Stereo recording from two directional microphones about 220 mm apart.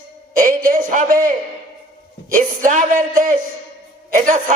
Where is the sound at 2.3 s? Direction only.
40° right (ahead or behind).